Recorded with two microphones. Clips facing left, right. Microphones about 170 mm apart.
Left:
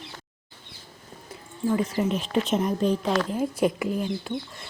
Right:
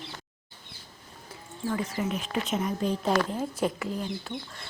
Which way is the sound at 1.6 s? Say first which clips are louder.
Left 6 dB; 25° left (ahead or behind).